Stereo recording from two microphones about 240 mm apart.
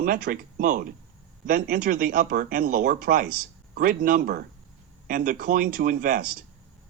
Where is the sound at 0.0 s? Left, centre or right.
Right.